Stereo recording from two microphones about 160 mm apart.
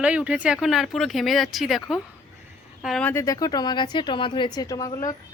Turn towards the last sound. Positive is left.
turn(degrees=25)  # may be behind; listen again after turning